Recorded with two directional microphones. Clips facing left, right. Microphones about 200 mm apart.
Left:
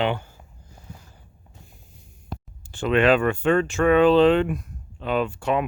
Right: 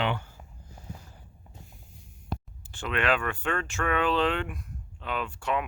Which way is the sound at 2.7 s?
30° left (ahead or behind).